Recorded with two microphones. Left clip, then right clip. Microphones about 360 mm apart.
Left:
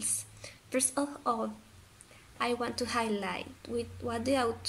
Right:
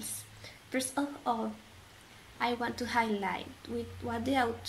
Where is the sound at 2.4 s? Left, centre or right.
Centre.